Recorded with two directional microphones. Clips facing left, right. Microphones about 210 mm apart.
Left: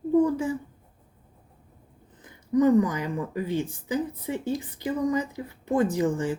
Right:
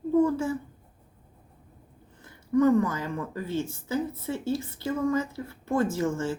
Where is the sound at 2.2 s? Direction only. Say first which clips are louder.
Left 1 dB; 15° left (ahead or behind).